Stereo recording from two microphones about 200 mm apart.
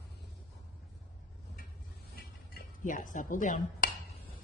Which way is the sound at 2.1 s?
45° left (ahead or behind).